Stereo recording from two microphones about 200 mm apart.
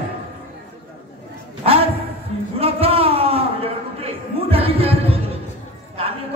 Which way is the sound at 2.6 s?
30° right (ahead or behind).